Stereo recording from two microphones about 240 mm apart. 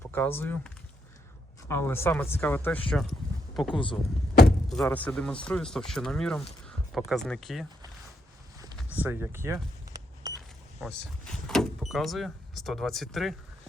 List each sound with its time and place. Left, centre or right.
0.1 s speech: centre
8.5 s a sound: centre
10.8 s speech: centre